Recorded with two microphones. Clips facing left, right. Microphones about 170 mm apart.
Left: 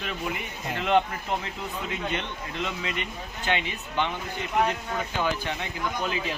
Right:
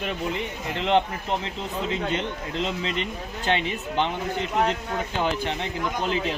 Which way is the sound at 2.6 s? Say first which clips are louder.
Right 4 dB; 30° right (ahead or behind).